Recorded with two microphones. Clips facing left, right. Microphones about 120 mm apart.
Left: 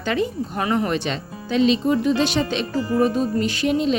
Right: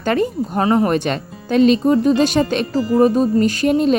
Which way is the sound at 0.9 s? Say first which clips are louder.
Right 5 dB; 50° right (ahead or behind).